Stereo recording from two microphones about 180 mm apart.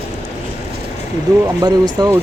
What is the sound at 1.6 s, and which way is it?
Speech, 20° right (ahead or behind).